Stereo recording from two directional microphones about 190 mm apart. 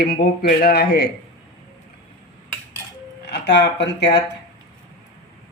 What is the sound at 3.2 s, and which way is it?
Speech, 60° left (ahead or behind).